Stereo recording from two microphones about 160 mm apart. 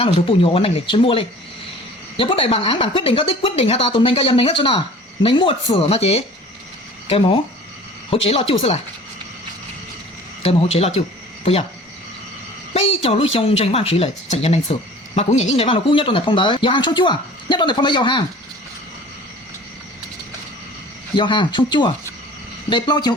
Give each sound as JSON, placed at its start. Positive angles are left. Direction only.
{"t": 0.0, "sound": "speech", "side_deg": 35}
{"t": 10.4, "sound": "speech", "side_deg": 40}
{"t": 12.7, "sound": "speech", "side_deg": 40}
{"t": 21.2, "sound": "speech", "side_deg": 30}